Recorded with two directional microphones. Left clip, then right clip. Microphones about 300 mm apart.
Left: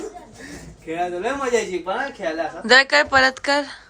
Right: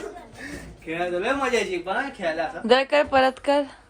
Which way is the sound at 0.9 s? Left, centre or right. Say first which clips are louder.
Left 1 dB; centre.